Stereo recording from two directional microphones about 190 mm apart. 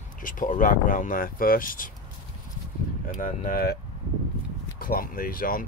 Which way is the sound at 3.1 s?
45° left (ahead or behind).